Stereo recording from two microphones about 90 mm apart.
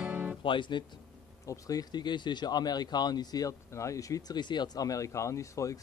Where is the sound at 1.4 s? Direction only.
40° left (ahead or behind).